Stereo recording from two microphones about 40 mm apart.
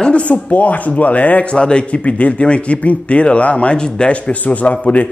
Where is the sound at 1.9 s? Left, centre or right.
Left.